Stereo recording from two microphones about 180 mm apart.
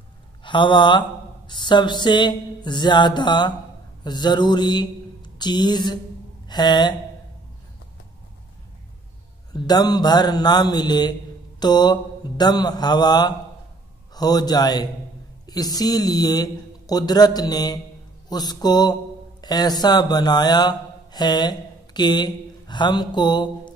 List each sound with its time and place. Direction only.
0.4 s a man's voice: 25° left (ahead or behind)
9.5 s a man's voice: 20° left (ahead or behind)